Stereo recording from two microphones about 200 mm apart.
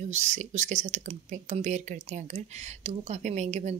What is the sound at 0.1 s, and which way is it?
Speech, 35° right (ahead or behind).